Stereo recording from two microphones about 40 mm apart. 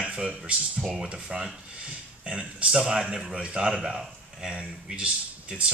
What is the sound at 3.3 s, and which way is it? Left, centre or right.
Speech, right.